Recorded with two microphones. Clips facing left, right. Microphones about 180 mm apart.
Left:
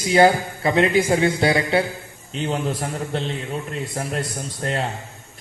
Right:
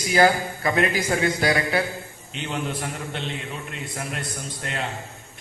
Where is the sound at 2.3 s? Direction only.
35° left (ahead or behind).